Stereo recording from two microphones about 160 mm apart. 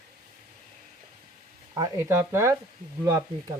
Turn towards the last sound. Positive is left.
turn(degrees=-25)  # may be behind; listen again after turning